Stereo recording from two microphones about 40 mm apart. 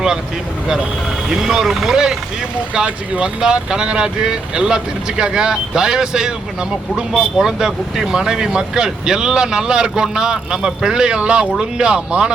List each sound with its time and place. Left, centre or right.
1.3 s speech: centre
2.7 s speech: right